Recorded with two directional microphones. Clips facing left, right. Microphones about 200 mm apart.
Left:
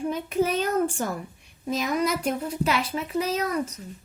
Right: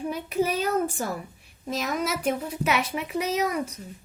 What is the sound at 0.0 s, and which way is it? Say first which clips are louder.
A child's voice: left 2 dB; 10° right (ahead or behind).